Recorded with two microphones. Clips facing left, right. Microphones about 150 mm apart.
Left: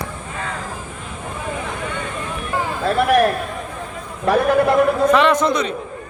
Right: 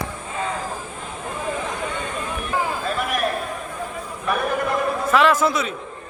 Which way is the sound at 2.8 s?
70° left (ahead or behind).